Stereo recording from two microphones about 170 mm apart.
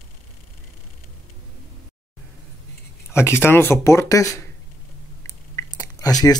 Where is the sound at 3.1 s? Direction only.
15° left (ahead or behind).